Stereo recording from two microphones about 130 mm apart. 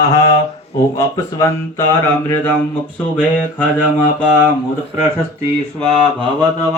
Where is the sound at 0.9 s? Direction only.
25° left (ahead or behind).